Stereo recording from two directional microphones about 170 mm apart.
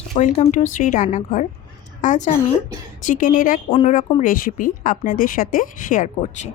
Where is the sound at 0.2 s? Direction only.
45° left (ahead or behind).